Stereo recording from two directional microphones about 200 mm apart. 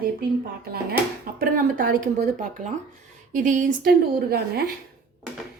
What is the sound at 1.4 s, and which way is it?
A woman's voice, 45° right (ahead or behind).